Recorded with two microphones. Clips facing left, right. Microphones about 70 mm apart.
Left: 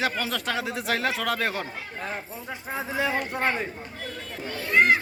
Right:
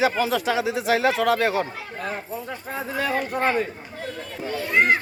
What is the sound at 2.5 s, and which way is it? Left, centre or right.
Speech, centre.